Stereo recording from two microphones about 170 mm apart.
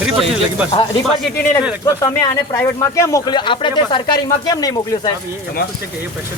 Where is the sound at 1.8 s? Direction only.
20° left (ahead or behind).